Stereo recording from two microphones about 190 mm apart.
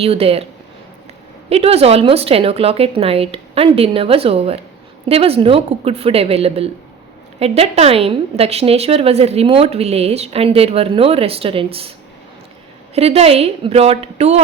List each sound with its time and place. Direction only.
0.0 s a woman's voice: 30° right (ahead or behind)
1.5 s a woman's voice: 30° right (ahead or behind)
12.9 s a woman's voice: 30° right (ahead or behind)